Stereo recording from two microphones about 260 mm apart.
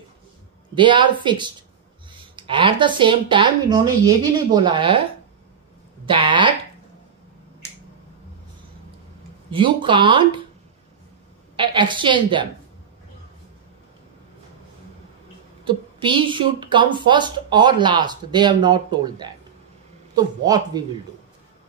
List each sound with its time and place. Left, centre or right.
0.7 s a woman's voice: centre
6.0 s speech: centre
9.5 s speech: centre
11.5 s speech: centre
15.6 s a woman's voice: centre